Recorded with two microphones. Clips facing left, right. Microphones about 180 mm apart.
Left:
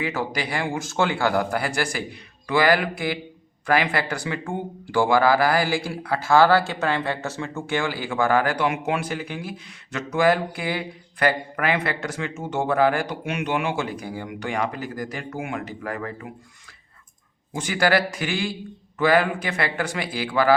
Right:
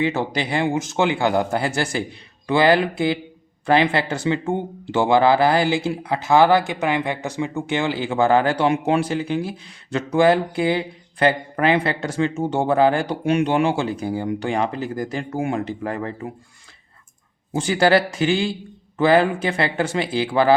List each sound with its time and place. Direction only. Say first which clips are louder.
0.0 s speech: right 5 dB; 25° right (ahead or behind)
17.5 s speech: right 4 dB; 30° right (ahead or behind)